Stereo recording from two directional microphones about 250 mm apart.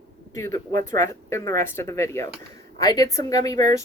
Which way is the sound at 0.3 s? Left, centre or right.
Centre.